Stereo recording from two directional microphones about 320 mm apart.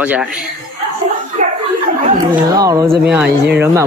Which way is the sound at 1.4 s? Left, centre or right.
Right.